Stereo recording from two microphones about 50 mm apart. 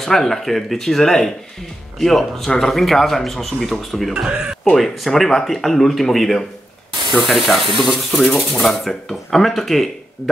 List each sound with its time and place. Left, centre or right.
0.0 s speech: centre
4.3 s speech: centre
4.7 s speech: centre